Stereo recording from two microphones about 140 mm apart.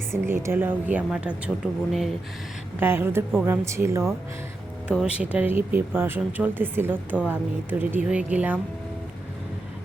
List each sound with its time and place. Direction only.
0.1 s speech: 20° right (ahead or behind); by 2.1 s centre (ahead or behind)
2.8 s speech: 15° right (ahead or behind)
4.9 s speech: 10° right (ahead or behind)